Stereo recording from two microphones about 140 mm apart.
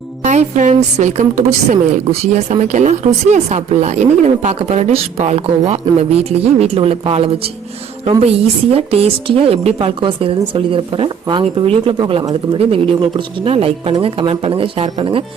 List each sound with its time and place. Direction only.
0.3 s a woman's voice: 60° right (ahead or behind)
2.0 s speech: 55° right (ahead or behind)
8.7 s a woman's voice: 45° right (ahead or behind)